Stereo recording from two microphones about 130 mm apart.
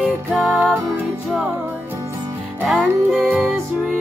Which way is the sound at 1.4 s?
15° right (ahead or behind).